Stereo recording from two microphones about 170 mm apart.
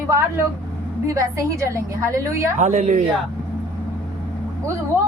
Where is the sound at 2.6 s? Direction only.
45° right (ahead or behind).